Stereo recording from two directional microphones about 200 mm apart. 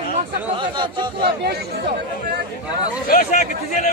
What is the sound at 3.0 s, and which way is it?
Speech, 45° left (ahead or behind).